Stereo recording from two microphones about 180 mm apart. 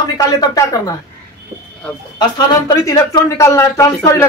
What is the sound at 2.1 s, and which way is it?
Speech, 20° left (ahead or behind).